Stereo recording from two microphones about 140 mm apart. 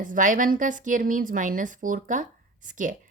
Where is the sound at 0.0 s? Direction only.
70° right (ahead or behind).